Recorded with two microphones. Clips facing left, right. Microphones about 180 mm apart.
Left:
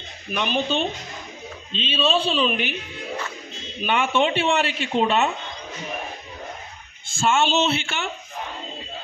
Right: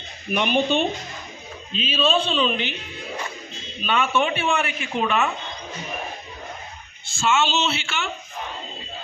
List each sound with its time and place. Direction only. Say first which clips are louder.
0.3 s a man's voice: right 3 dB; 15° right (ahead or behind); by 2.7 s 5° left (ahead or behind)
3.8 s speech: left 1 dB; 20° left (ahead or behind)
7.1 s speech: left 1 dB; 50° left (ahead or behind)